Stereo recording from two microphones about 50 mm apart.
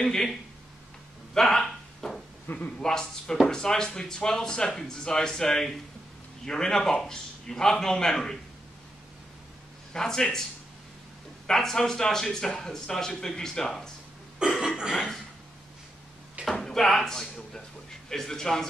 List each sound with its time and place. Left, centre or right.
0.0 s a man's voice: centre
1.3 s a sound: centre
2.4 s a man's voice: left
2.8 s a man's voice: centre
9.9 s a man's voice: centre
11.4 s a man's voice: centre
14.4 s a sound: centre
16.4 s a sound: right
16.7 s a man's voice: centre